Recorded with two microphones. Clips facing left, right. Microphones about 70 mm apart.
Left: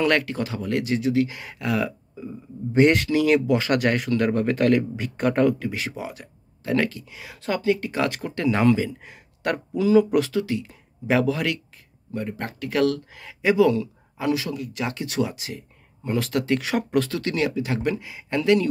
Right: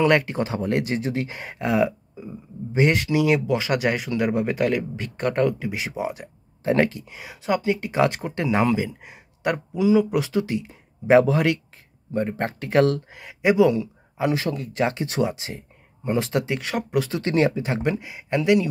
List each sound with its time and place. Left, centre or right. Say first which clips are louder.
0.0 s speech: right 2 dB; centre
2.2 s speech: left 3 dB; centre
5.6 s speech: right 2 dB; centre
10.3 s speech: right 1 dB; right
14.3 s speech: right 1 dB; right
16.6 s speech: left 2 dB; centre
17.0 s speech: right 4 dB; right